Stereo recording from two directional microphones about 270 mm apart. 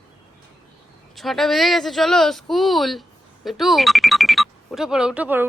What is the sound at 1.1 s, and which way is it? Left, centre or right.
Speech, centre.